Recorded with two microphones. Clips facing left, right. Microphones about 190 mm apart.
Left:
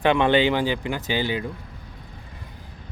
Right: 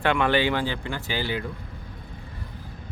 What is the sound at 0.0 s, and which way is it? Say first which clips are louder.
Speech: left 4 dB; 20° left (ahead or behind).